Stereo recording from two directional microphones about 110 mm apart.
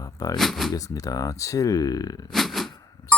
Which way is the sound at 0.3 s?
Centre (ahead or behind).